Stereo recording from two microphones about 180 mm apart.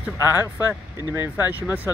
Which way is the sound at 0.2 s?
10° right (ahead or behind).